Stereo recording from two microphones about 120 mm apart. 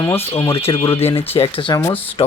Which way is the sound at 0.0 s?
20° left (ahead or behind).